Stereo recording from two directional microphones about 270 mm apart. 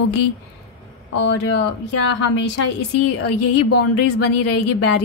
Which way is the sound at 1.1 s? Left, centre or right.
Left.